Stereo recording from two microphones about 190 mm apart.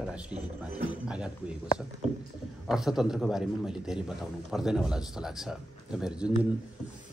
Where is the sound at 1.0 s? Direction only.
5° right (ahead or behind).